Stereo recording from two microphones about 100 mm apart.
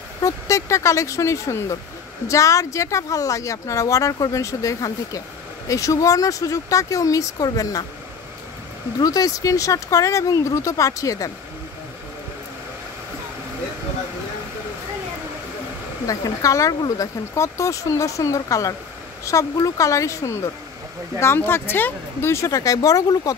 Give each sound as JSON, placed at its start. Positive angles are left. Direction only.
{"t": 0.2, "sound": "speech", "side_deg": 30}
{"t": 9.0, "sound": "speech", "side_deg": 35}
{"t": 16.1, "sound": "speech", "side_deg": 35}